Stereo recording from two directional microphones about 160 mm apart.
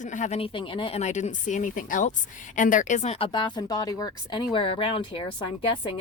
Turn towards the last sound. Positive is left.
turn(degrees=35)  # may be behind; listen again after turning